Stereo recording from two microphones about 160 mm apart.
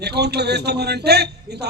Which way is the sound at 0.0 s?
90° right.